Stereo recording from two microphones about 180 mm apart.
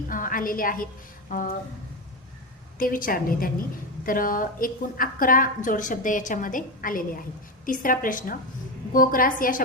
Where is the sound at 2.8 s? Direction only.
50° left (ahead or behind).